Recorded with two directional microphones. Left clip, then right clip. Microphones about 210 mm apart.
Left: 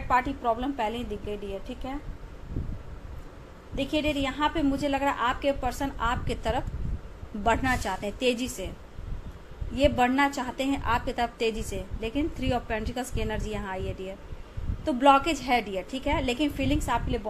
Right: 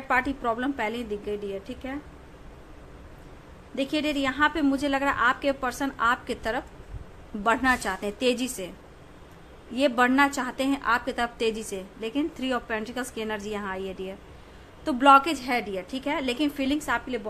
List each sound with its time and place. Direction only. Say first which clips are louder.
0.1 s a woman's voice: even; 20° right (ahead or behind)
3.7 s a woman's voice: right 1 dB; 15° right (ahead or behind)
9.8 s a woman's voice: right 2 dB; 15° right (ahead or behind)